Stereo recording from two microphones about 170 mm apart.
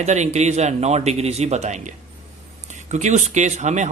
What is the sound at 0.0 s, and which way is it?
A man's voice, 40° right (ahead or behind).